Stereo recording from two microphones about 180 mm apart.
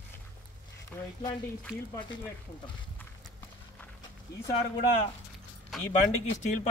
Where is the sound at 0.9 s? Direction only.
10° left (ahead or behind).